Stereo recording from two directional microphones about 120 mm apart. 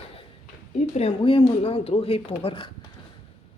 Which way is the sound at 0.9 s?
55° left (ahead or behind).